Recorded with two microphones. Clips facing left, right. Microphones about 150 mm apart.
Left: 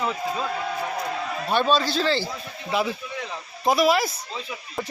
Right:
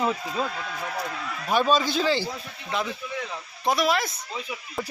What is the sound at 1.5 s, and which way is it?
Speech, 5° right (ahead or behind).